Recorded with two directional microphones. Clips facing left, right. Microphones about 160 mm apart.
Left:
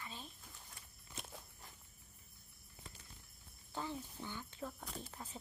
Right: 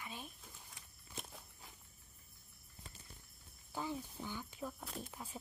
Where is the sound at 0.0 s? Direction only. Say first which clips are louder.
Right 2 dB; 15° right (ahead or behind).